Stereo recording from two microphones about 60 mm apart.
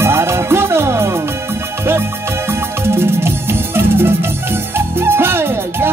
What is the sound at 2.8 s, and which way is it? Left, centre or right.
Music, right.